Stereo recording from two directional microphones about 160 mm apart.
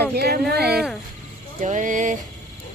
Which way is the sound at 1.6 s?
50° right (ahead or behind).